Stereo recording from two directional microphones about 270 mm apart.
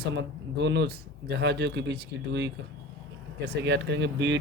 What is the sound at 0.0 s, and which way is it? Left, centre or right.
Speech, right.